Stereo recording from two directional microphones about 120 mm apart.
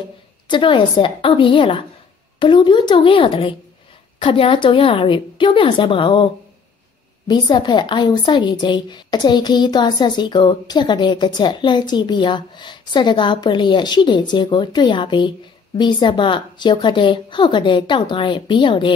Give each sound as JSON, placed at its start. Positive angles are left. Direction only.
{"t": 0.5, "sound": "a woman's voice", "side_deg": 40}